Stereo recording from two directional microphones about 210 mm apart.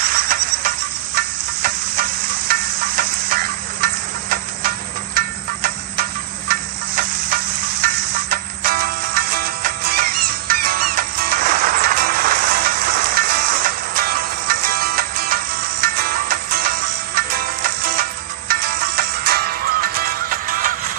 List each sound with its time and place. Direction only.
0.0 s a sound: 45° right (ahead or behind)
3.8 s hiss: 45° right (ahead or behind)
6.5 s stir: 45° right (ahead or behind)
7.8 s music: 45° right (ahead or behind)